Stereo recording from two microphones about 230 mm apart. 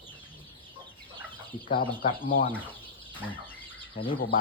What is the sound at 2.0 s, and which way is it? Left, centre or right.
Speech, left.